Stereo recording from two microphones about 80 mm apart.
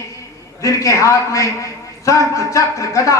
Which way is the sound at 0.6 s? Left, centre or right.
Left.